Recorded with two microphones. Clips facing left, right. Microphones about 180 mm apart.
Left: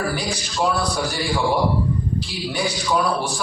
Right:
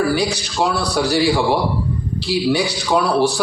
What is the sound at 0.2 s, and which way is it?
A man's voice, 70° right (ahead or behind).